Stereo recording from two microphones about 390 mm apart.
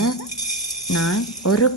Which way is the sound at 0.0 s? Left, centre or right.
Left.